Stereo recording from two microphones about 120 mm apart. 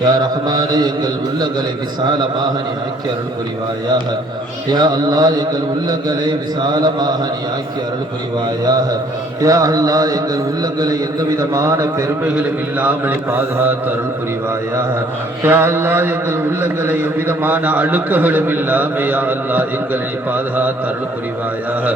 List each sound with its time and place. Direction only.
0.0 s mantra: 35° right (ahead or behind)
4.7 s mantra: 35° right (ahead or behind)
6.6 s mantra: 35° right (ahead or behind)
9.4 s mantra: 30° right (ahead or behind)
12.2 s a man's voice: 15° right (ahead or behind)
15.4 s a man's voice: 20° right (ahead or behind)